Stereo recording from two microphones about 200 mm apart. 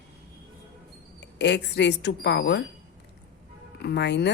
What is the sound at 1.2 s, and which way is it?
A woman's voice, 60° left (ahead or behind).